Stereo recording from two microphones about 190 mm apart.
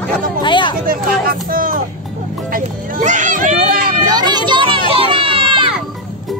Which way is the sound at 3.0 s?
40° right (ahead or behind).